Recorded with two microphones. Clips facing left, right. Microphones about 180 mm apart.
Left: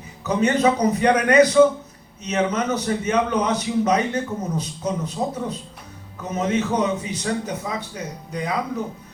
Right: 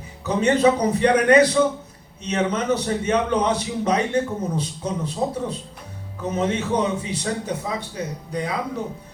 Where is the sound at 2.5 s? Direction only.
30° right (ahead or behind).